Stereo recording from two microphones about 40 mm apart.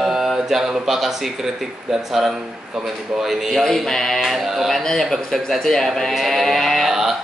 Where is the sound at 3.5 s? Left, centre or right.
Centre.